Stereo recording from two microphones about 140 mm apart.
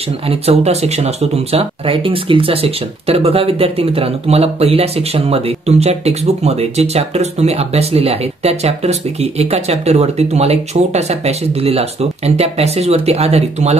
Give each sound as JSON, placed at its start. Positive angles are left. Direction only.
{"t": 0.3, "sound": "speech", "side_deg": -45}